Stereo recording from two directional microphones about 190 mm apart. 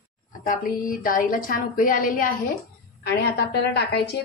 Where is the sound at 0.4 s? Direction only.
45° left (ahead or behind).